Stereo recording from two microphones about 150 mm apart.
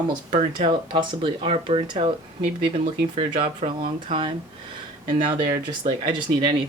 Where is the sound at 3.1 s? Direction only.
35° right (ahead or behind).